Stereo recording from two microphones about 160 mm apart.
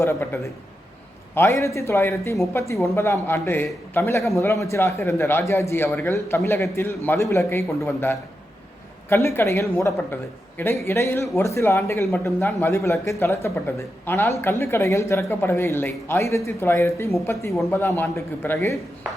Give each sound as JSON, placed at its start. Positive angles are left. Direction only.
{"t": 0.0, "sound": "a man's voice", "side_deg": 15}